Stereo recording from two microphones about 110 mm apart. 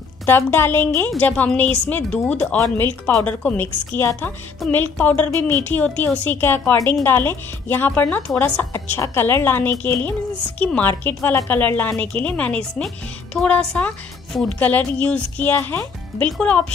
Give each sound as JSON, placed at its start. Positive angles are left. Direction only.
{"t": 0.3, "sound": "a woman's voice", "side_deg": 20}